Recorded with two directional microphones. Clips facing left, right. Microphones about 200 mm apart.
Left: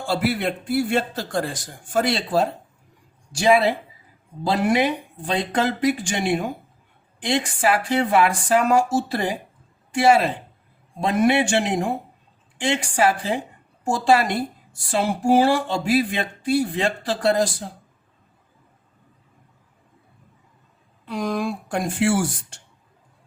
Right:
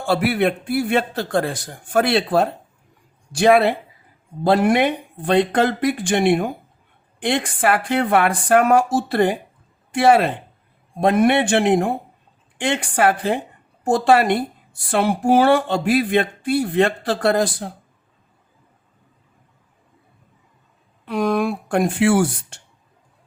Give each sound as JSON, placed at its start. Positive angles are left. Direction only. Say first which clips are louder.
{"t": 0.1, "sound": "a woman's voice", "louder": "right 4 dB", "side_deg": -60}
{"t": 21.0, "sound": "a woman's voice", "louder": "right 5 dB", "side_deg": -60}